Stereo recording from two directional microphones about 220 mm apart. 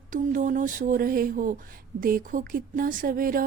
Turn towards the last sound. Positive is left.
turn(degrees=-40)  # may be behind; listen again after turning